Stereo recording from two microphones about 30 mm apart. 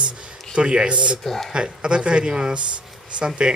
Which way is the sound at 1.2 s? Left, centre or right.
Centre.